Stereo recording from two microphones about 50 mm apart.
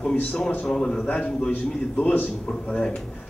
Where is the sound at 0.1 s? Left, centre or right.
Left.